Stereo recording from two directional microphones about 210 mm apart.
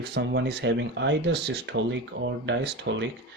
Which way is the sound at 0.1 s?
55° right (ahead or behind).